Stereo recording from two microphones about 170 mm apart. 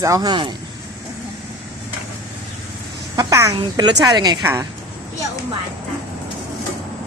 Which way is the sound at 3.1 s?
20° right (ahead or behind).